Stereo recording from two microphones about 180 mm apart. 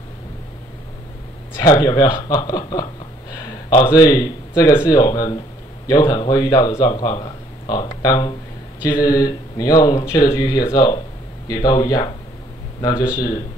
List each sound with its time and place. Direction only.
1.6 s speech: 20° left (ahead or behind)